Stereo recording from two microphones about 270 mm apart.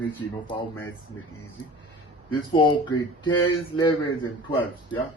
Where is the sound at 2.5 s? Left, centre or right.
Centre.